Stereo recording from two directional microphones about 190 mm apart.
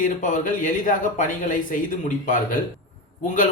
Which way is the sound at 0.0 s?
45° left (ahead or behind).